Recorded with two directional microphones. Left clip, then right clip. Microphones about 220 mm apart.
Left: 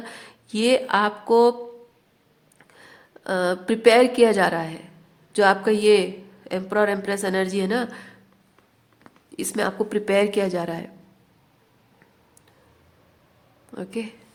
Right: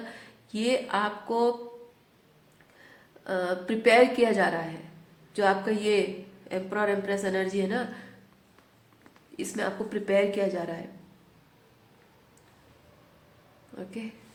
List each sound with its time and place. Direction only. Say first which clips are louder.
0.1 s speech: left 6 dB; 45° left (ahead or behind)
2.7 s a woman's voice: left 6 dB; 45° left (ahead or behind)
9.4 s a woman's voice: left 7 dB; 45° left (ahead or behind)
13.7 s a woman's voice: left 8 dB; 45° left (ahead or behind)